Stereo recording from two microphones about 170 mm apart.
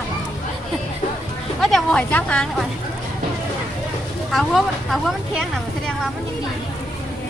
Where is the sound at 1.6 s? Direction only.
Centre (ahead or behind).